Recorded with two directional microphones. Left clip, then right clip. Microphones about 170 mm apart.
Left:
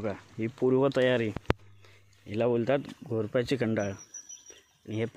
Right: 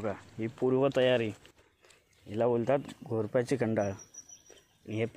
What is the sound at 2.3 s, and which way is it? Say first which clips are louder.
A man's voice: left 1 dB; 10° left (ahead or behind).